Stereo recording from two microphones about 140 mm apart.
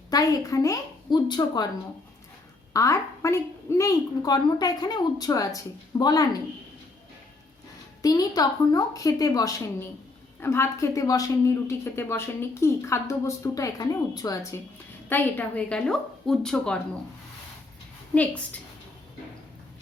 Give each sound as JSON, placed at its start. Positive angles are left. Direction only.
{"t": 0.1, "sound": "speech", "side_deg": 25}
{"t": 2.7, "sound": "speech", "side_deg": 20}
{"t": 8.0, "sound": "speech", "side_deg": 25}
{"t": 15.1, "sound": "a woman's voice", "side_deg": 10}